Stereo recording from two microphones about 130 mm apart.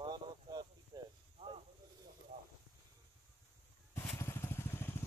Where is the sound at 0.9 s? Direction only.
30° right (ahead or behind).